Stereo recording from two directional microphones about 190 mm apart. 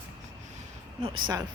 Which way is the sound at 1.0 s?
25° right (ahead or behind).